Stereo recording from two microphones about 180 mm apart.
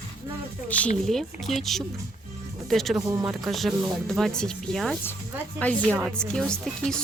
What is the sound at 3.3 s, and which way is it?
A woman's voice, centre (ahead or behind).